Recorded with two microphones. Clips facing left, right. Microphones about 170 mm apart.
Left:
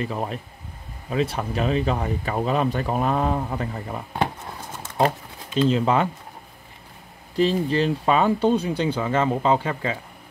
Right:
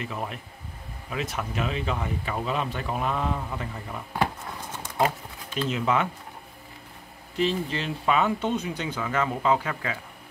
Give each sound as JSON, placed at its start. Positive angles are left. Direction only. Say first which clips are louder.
{"t": 0.0, "sound": "speech", "louder": "left 6 dB", "side_deg": 35}
{"t": 5.7, "sound": "speech", "louder": "left 4 dB", "side_deg": 35}
{"t": 7.3, "sound": "speech", "louder": "left 6 dB", "side_deg": 40}